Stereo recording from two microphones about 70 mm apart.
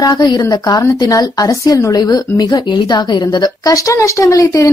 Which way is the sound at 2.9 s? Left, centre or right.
Left.